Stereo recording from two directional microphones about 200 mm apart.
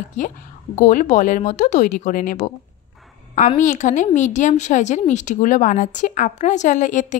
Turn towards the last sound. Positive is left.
turn(degrees=40)  # may be behind; listen again after turning